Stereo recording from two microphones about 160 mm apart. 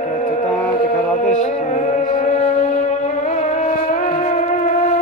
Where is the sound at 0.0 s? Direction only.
50° left (ahead or behind).